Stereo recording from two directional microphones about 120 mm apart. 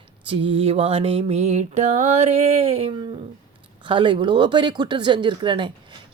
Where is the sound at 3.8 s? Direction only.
40° right (ahead or behind).